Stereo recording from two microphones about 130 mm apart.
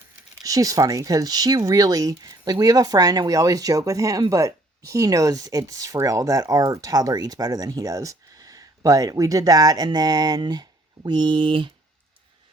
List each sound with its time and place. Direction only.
0.4 s speech: 25° right (ahead or behind)